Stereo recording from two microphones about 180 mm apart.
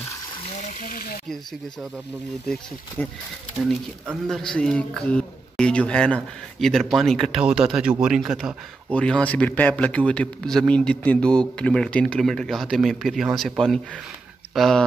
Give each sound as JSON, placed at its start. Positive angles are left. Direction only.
{"t": 0.3, "sound": "speech", "side_deg": 35}
{"t": 2.4, "sound": "a man's voice", "side_deg": 5}
{"t": 4.3, "sound": "a man's voice", "side_deg": 5}